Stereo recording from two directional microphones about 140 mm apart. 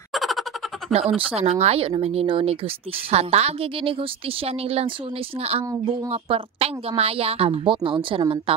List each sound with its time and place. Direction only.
0.1 s a sound: centre (ahead or behind)
0.9 s a woman's voice: 45° right (ahead or behind)
6.0 s a woman's voice: 40° right (ahead or behind)